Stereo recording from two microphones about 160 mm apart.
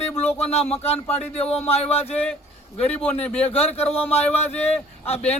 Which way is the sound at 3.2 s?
40° left (ahead or behind).